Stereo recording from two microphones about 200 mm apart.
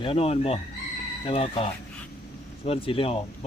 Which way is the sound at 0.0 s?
30° left (ahead or behind).